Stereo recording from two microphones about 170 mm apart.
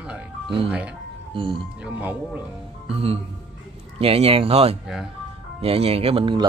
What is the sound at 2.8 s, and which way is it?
Speech, 35° right (ahead or behind).